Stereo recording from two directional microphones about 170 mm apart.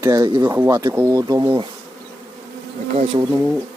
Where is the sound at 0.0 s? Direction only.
20° right (ahead or behind).